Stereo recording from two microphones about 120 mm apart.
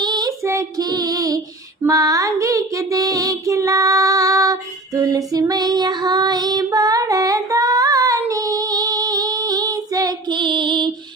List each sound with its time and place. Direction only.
0.0 s child singing: 35° right (ahead or behind)
4.9 s female singing: 30° right (ahead or behind)